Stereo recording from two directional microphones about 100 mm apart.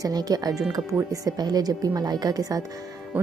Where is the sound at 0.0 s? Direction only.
40° right (ahead or behind).